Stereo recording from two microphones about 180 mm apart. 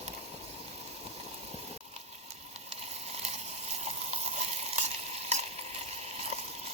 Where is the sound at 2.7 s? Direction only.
35° right (ahead or behind).